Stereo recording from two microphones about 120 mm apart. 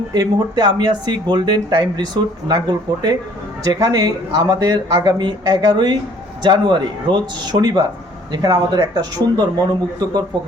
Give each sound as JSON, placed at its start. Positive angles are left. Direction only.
{"t": 0.1, "sound": "speech", "side_deg": -35}